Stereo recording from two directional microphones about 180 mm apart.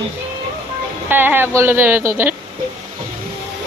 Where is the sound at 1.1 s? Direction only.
10° right (ahead or behind).